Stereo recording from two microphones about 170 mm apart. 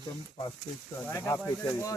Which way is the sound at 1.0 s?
15° left (ahead or behind).